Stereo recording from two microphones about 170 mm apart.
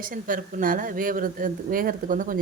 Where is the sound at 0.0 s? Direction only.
55° right (ahead or behind).